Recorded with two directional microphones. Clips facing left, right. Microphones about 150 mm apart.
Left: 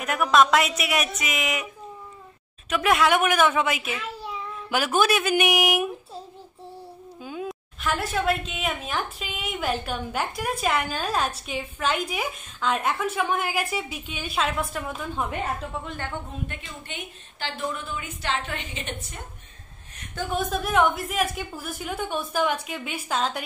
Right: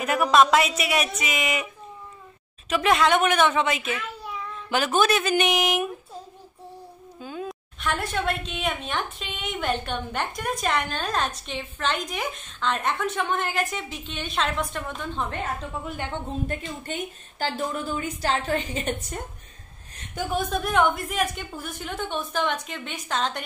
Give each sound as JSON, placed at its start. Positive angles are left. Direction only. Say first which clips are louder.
{"t": 0.0, "sound": "a woman's voice", "louder": "right 1 dB", "side_deg": 0}
{"t": 2.7, "sound": "a woman's voice", "louder": "even", "side_deg": 5}
{"t": 7.2, "sound": "a sound", "louder": "even", "side_deg": 10}
{"t": 7.4, "sound": "a woman's voice", "louder": "left 1 dB", "side_deg": 0}
{"t": 15.8, "sound": "a woman's voice", "louder": "right 1 dB", "side_deg": 0}
{"t": 16.4, "sound": "a woman's voice", "louder": "right 7 dB", "side_deg": -40}
{"t": 20.2, "sound": "a woman's voice", "louder": "even", "side_deg": 0}